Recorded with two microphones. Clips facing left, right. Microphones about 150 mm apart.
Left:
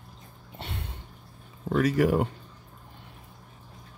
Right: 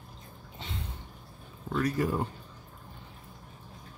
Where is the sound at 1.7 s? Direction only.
90° left.